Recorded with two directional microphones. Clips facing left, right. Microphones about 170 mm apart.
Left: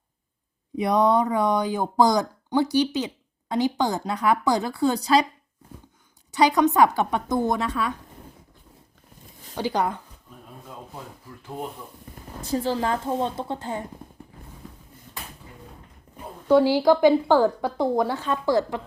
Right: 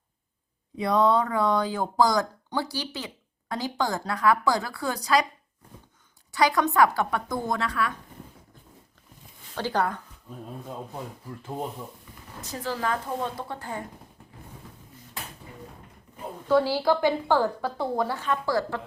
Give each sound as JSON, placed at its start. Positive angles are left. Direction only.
{"t": 0.8, "sound": "speech", "side_deg": 20}
{"t": 6.3, "sound": "speech", "side_deg": 20}
{"t": 9.6, "sound": "a woman's voice", "side_deg": 15}
{"t": 12.1, "sound": "a sound", "side_deg": 45}
{"t": 12.4, "sound": "speech", "side_deg": 30}
{"t": 16.5, "sound": "a woman's voice", "side_deg": 15}